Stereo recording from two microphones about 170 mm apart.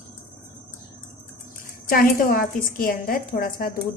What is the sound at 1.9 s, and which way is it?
A woman's voice, 60° left (ahead or behind).